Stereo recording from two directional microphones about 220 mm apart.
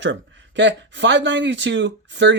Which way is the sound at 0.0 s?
55° right (ahead or behind).